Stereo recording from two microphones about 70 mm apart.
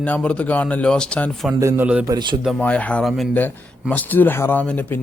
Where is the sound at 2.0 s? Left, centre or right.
Right.